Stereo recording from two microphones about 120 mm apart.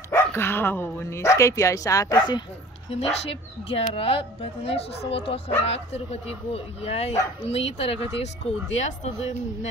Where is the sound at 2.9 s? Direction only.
60° left (ahead or behind).